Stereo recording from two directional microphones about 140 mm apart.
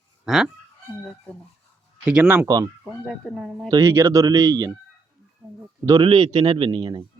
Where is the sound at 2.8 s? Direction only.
Centre (ahead or behind).